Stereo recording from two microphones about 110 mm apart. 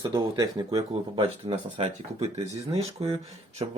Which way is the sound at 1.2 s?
60° right (ahead or behind).